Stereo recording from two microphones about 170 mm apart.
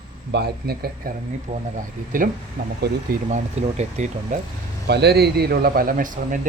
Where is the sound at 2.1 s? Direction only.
55° right (ahead or behind).